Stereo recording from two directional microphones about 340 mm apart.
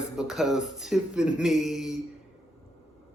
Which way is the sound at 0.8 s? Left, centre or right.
Centre.